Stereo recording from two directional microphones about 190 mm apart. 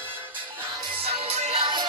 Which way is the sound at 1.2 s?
30° right (ahead or behind).